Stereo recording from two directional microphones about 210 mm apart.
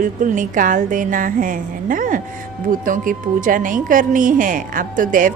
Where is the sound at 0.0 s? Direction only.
40° right (ahead or behind).